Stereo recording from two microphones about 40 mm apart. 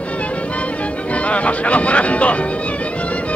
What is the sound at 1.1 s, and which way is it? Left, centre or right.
Speech, left.